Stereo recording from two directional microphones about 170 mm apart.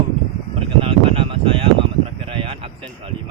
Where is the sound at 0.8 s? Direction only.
35° right (ahead or behind).